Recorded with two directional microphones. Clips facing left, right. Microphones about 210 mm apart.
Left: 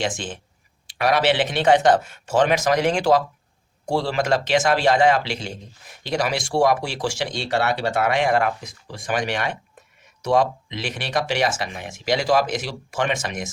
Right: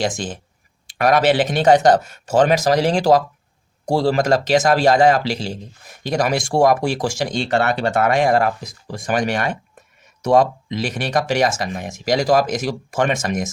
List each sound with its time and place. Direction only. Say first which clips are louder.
0.0 s a man's voice: right 4 dB; 40° right (ahead or behind)